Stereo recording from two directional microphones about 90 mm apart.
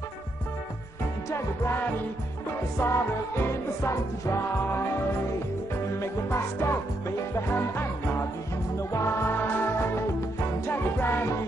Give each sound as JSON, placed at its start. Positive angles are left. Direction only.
{"t": 1.3, "sound": "music", "side_deg": 30}
{"t": 5.9, "sound": "music", "side_deg": 30}